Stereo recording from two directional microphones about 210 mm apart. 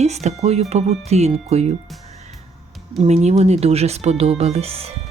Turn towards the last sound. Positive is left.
turn(degrees=-30)  # may be behind; listen again after turning